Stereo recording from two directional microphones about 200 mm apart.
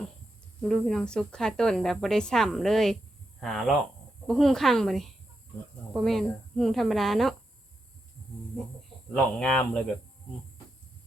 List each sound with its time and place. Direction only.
0.6 s speech: centre (ahead or behind)
9.1 s speech: 5° left (ahead or behind)